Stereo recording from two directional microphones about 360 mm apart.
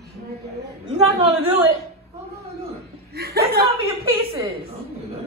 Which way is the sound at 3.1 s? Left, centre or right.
Right.